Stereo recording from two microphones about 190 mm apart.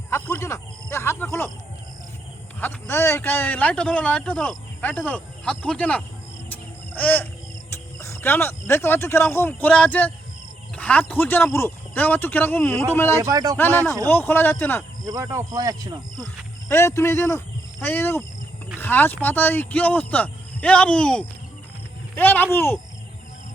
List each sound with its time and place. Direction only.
0.1 s snake: 15° left (ahead or behind)
2.6 s speech: 10° left (ahead or behind)
6.5 s a sound: 10° left (ahead or behind)
7.7 s speech: 15° left (ahead or behind)
13.1 s speech: 20° right (ahead or behind)
13.6 s speech: 10° left (ahead or behind)
15.0 s speech: 15° right (ahead or behind)
16.2 s speech: 15° left (ahead or behind)